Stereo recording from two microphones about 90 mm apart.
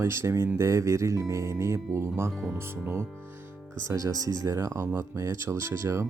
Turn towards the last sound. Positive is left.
turn(degrees=-35)  # may be behind; listen again after turning